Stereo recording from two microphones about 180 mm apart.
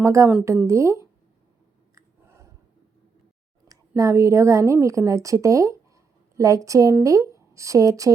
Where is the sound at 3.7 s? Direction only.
20° right (ahead or behind).